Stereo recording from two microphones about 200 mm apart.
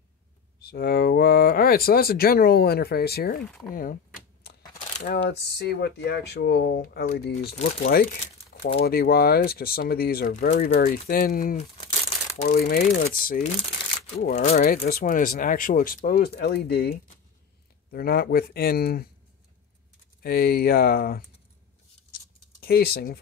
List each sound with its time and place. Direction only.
0.7 s speech: 50° left (ahead or behind)
3.7 s a sound: 45° left (ahead or behind)
4.7 s coin: 35° left (ahead or behind)
5.1 s speech: 55° left (ahead or behind)
14.3 s speech: 35° left (ahead or behind)
14.6 s speech: 45° left (ahead or behind)
20.2 s speech: 50° left (ahead or behind)
22.1 s a sound: 50° left (ahead or behind)